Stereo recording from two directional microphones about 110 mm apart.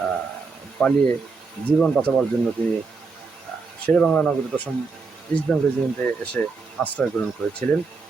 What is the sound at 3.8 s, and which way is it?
Speech, 5° left (ahead or behind).